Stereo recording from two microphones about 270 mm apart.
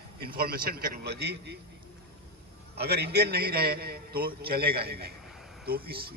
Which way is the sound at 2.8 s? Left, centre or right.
Right.